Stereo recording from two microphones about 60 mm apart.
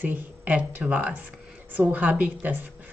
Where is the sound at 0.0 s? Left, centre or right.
Right.